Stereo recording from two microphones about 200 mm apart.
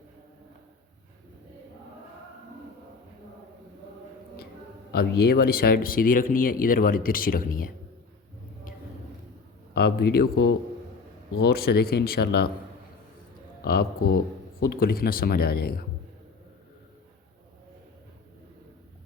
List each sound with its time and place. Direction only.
4.9 s speech: 50° left (ahead or behind)
9.7 s speech: 50° left (ahead or behind)
14.6 s speech: 50° left (ahead or behind)